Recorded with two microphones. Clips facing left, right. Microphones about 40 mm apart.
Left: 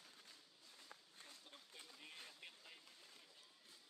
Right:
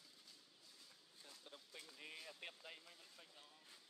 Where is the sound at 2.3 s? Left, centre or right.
Right.